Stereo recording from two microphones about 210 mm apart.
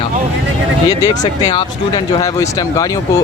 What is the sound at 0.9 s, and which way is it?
Speech, 20° left (ahead or behind).